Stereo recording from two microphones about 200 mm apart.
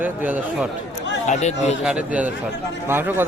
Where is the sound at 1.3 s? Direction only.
35° left (ahead or behind).